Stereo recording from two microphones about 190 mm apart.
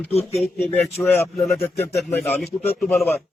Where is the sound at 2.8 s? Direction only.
Centre (ahead or behind).